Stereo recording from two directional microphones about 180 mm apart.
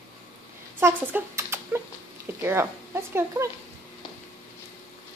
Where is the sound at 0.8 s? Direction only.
10° right (ahead or behind).